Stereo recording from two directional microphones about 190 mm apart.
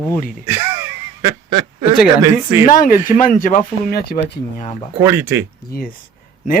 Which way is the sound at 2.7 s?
45° left (ahead or behind).